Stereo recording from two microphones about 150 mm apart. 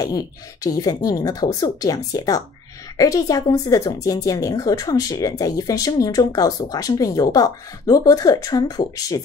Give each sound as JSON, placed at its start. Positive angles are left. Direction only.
{"t": 0.7, "sound": "a woman's voice", "side_deg": 25}